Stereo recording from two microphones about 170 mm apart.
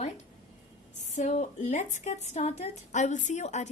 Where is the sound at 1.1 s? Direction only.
40° left (ahead or behind).